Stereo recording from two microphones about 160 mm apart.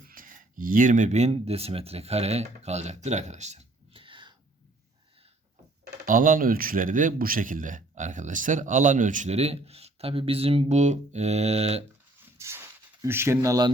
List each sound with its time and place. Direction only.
0.1 s speech: 60° right (ahead or behind); by 4.4 s 30° right (ahead or behind)
6.1 s speech: 55° right (ahead or behind); by 11.9 s 40° right (ahead or behind)
12.2 s a sound: 15° right (ahead or behind)